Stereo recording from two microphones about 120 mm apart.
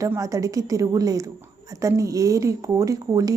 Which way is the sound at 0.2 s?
30° right (ahead or behind).